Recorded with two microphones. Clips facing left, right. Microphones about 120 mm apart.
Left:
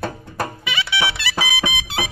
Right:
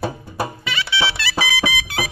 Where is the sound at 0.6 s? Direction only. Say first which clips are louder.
Left 1 dB; 15° left (ahead or behind).